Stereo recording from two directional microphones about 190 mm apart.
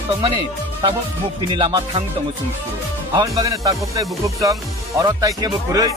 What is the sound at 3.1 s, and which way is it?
Speech, 20° right (ahead or behind).